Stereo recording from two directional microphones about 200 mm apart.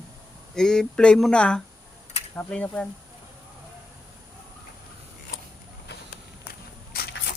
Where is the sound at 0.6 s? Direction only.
5° left (ahead or behind).